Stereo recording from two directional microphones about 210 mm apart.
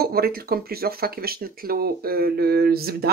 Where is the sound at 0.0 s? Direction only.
45° right (ahead or behind).